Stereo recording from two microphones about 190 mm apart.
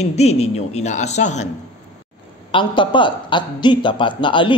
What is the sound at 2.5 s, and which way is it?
A man's voice, 25° left (ahead or behind).